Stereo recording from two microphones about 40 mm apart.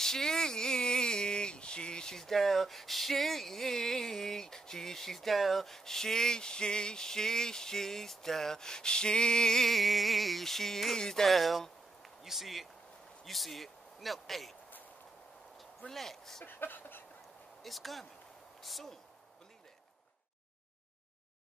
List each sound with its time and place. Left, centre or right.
0.0 s speech: centre
2.1 s speech: centre
9.7 s music: centre
11.0 s speech: centre
11.2 s music: centre
12.0 s a sound: centre
13.2 s speech: centre
15.9 s speech: centre
16.4 s a sound: left
17.6 s music: centre
18.6 s speech: centre